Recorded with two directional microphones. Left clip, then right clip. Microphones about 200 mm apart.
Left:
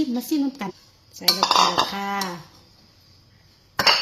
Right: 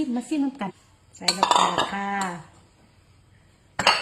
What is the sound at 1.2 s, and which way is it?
Cutlery, 15° left (ahead or behind).